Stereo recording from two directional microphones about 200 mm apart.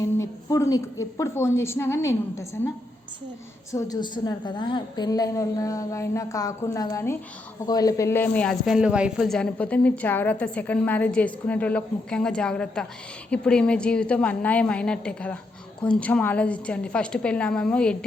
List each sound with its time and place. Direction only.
0.0 s a sound: 15° left (ahead or behind)
1.1 s speech: 15° left (ahead or behind)
3.7 s a woman's voice: 15° left (ahead or behind)